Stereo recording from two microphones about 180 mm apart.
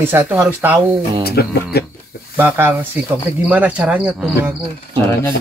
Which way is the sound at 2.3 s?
10° right (ahead or behind).